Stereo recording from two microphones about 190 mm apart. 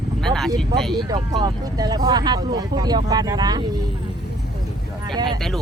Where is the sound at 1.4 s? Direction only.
20° right (ahead or behind).